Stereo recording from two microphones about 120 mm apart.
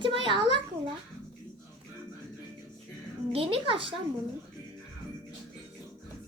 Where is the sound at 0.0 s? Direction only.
45° right (ahead or behind).